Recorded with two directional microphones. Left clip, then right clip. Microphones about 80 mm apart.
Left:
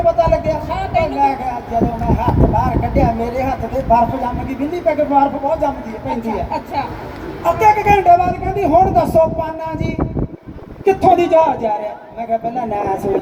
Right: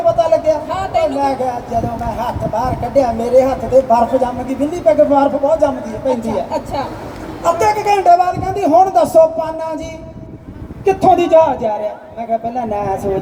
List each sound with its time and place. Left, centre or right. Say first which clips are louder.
0.2 s a sound: right 2 dB; right
1.2 s speech: even; right
10.8 s speech: right 1 dB; right